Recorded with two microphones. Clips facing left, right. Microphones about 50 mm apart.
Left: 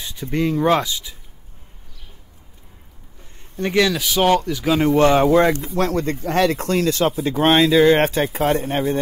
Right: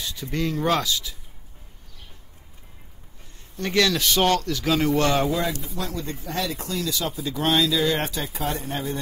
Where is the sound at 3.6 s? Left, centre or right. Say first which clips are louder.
Left 3 dB; centre.